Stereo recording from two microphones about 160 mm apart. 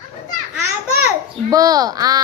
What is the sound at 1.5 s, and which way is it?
Speech, 25° right (ahead or behind).